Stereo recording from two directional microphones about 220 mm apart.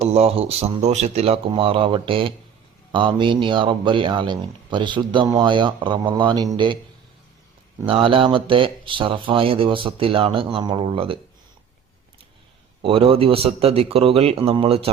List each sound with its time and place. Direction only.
0.1 s speech: 25° right (ahead or behind)
7.9 s speech: 25° right (ahead or behind)
12.8 s speech: 25° right (ahead or behind)